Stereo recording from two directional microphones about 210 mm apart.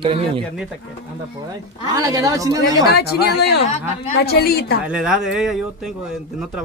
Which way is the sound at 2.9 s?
50° left (ahead or behind).